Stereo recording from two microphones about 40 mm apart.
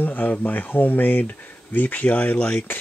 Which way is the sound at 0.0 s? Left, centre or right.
Left.